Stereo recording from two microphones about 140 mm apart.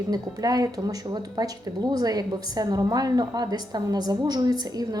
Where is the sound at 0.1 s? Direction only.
25° right (ahead or behind).